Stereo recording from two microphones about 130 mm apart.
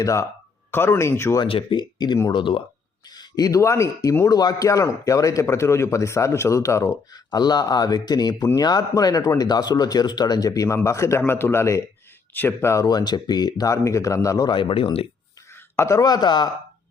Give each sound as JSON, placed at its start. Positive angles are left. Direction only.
{"t": 0.0, "sound": "a man's voice", "side_deg": 25}
{"t": 1.5, "sound": "speech", "side_deg": 45}
{"t": 3.2, "sound": "a man's voice", "side_deg": 30}
{"t": 15.7, "sound": "speech", "side_deg": 20}